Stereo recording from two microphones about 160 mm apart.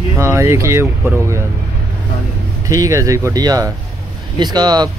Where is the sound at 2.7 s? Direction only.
20° right (ahead or behind).